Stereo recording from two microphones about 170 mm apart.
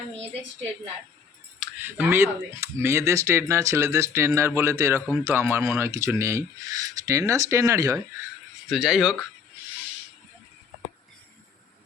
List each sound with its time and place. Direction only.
1.5 s speech: 10° right (ahead or behind)
8.7 s speech: centre (ahead or behind)